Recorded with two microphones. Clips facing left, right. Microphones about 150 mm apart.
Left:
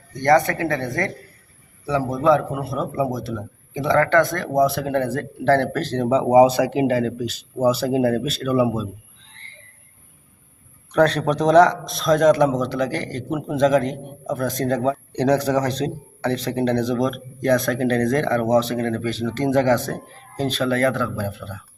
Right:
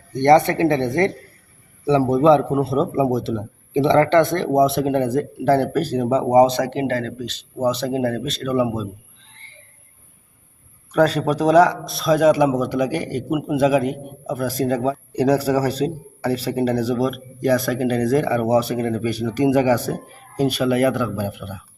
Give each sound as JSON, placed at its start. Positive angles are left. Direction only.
{"t": 0.1, "sound": "a man's voice", "side_deg": -25}
{"t": 9.3, "sound": "a sound", "side_deg": -5}
{"t": 10.9, "sound": "a man's voice", "side_deg": -5}